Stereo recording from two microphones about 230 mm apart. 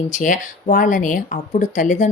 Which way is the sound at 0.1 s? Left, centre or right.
Left.